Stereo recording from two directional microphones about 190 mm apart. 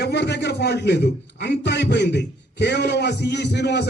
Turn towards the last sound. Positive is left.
turn(degrees=60)  # may be behind; listen again after turning